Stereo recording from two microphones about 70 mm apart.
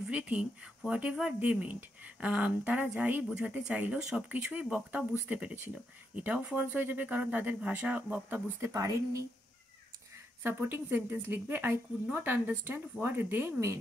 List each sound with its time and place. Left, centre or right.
0.1 s speech: centre
8.7 s speech: right
10.1 s speech: right